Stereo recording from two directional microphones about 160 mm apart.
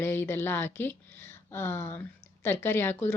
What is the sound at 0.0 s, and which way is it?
A woman's voice, 15° left (ahead or behind).